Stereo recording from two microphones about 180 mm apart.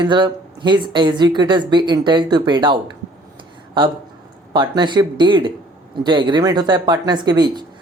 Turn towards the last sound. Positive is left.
turn(degrees=-25)  # may be behind; listen again after turning